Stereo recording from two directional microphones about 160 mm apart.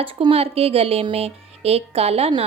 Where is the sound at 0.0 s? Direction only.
35° right (ahead or behind).